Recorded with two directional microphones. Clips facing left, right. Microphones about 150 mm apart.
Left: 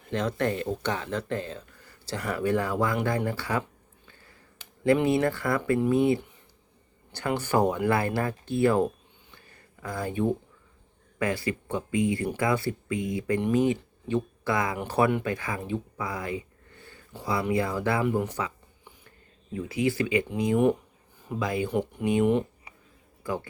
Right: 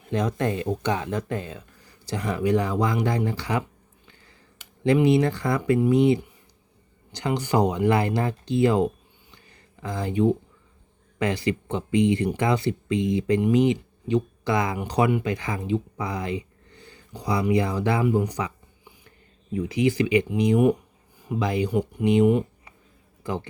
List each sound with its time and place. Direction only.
0.1 s speech: 15° right (ahead or behind)
5.0 s speech: 15° right (ahead or behind)
16.8 s a sound: 15° right (ahead or behind)
17.5 s speech: 20° right (ahead or behind)
18.3 s a sound: 15° right (ahead or behind)
19.5 s speech: 20° right (ahead or behind)
21.9 s speech: 5° right (ahead or behind)
23.2 s a man's voice: 20° right (ahead or behind)